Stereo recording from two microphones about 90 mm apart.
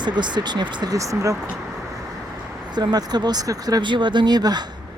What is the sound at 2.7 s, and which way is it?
Speech, 50° right (ahead or behind).